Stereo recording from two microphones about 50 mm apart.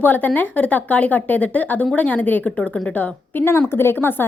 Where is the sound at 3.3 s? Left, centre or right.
Left.